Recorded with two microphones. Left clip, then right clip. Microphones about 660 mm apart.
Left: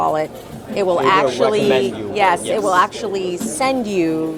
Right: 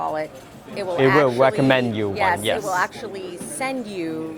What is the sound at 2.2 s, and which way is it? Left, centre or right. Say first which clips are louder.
Speech: left 6 dB; left.